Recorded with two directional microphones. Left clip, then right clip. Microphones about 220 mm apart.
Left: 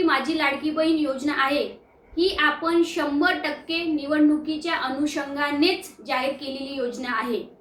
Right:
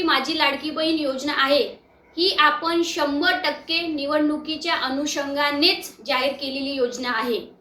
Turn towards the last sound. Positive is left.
turn(degrees=20)  # may be behind; listen again after turning